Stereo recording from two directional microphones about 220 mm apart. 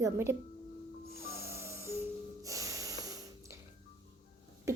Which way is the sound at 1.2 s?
10° right (ahead or behind).